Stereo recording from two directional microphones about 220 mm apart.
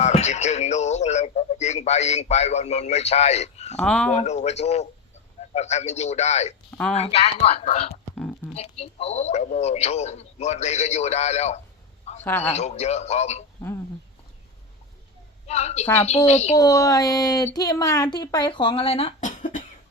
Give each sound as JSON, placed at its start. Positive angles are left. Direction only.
{"t": 0.0, "sound": "speech", "side_deg": 30}
{"t": 3.8, "sound": "speech", "side_deg": 5}
{"t": 4.1, "sound": "a man's voice", "side_deg": 30}
{"t": 8.1, "sound": "speech", "side_deg": 5}
{"t": 8.5, "sound": "speech", "side_deg": 25}
{"t": 12.2, "sound": "speech", "side_deg": 10}
{"t": 12.5, "sound": "speech", "side_deg": 30}
{"t": 15.4, "sound": "speech", "side_deg": 30}
{"t": 16.6, "sound": "speech", "side_deg": 15}